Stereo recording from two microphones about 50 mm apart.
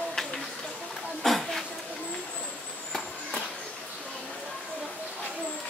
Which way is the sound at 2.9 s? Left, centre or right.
Centre.